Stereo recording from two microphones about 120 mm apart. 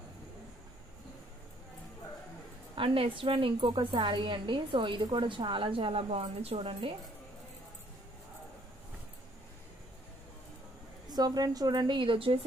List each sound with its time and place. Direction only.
2.7 s a woman's voice: 50° right (ahead or behind)
11.1 s a woman's voice: 35° right (ahead or behind)